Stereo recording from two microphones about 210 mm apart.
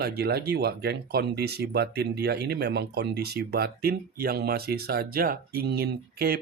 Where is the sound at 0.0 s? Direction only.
50° right (ahead or behind).